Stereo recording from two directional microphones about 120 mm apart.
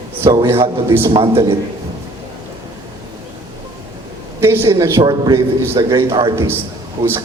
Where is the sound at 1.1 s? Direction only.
50° right (ahead or behind).